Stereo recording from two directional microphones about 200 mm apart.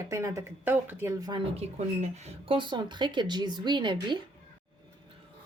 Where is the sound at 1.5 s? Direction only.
35° right (ahead or behind).